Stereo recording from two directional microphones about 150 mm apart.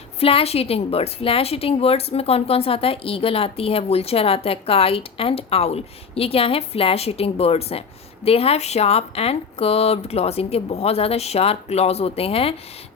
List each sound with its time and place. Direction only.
0.2 s a woman's voice: 40° left (ahead or behind)